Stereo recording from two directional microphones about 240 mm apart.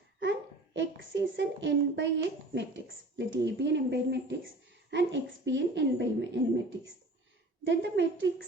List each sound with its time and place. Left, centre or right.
0.2 s a child's voice: right
7.6 s a woman's voice: right